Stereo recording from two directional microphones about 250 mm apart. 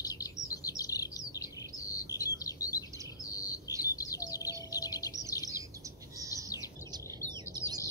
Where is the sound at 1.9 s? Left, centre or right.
Centre.